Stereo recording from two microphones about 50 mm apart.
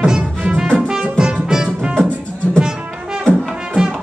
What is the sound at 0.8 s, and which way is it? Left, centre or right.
Music, centre.